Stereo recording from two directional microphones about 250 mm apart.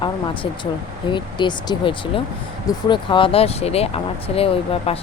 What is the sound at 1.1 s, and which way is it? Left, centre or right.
Speech, centre.